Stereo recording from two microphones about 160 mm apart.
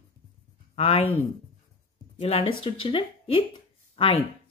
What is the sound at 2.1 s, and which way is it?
Speech, 35° left (ahead or behind).